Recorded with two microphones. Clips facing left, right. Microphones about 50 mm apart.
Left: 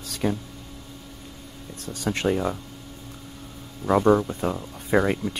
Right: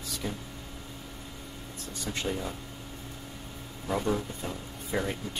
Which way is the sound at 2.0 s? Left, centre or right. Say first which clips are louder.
Left 10 dB; left.